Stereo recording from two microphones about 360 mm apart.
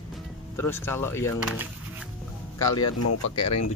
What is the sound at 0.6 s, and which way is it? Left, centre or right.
Speech, centre.